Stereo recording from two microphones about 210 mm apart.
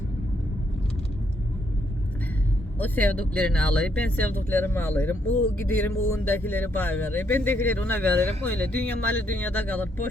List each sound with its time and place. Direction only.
2.7 s speech: 10° left (ahead or behind)